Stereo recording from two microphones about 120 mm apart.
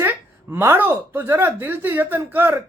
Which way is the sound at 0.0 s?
15° right (ahead or behind).